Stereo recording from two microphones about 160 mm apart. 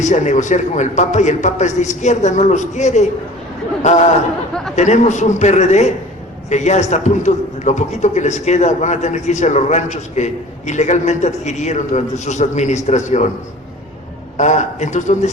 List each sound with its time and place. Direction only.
0.0 s a man's voice: 50° left (ahead or behind)
4.7 s a man's voice: 45° left (ahead or behind)
14.3 s a man's voice: 50° left (ahead or behind)